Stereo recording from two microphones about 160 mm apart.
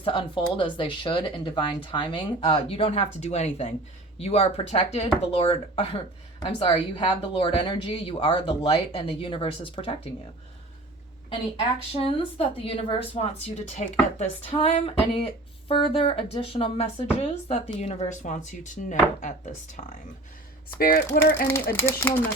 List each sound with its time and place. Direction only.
0.0 s speech: 30° left (ahead or behind)
11.9 s speech: 35° left (ahead or behind)
20.7 s speech: 70° left (ahead or behind)
21.4 s speech: 15° left (ahead or behind)